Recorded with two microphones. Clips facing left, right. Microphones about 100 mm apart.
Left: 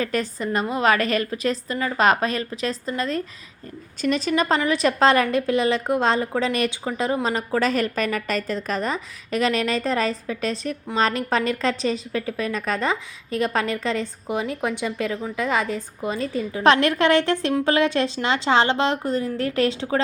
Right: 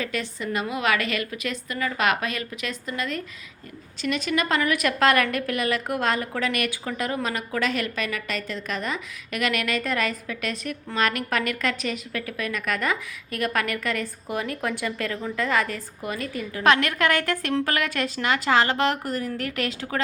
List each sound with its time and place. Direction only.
0.0 s a woman's voice: 40° left (ahead or behind)